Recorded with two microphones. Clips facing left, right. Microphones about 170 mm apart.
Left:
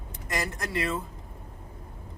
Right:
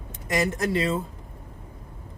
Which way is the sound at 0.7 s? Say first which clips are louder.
Right 1 dB; 25° right (ahead or behind).